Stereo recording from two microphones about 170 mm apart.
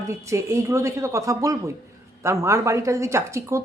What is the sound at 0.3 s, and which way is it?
A woman's voice, 15° right (ahead or behind).